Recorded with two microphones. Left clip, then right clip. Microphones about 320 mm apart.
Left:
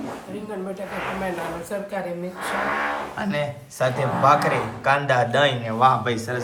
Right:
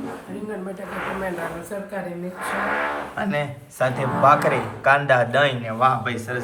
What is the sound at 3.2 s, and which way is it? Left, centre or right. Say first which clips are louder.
Speech: right 1 dB; centre.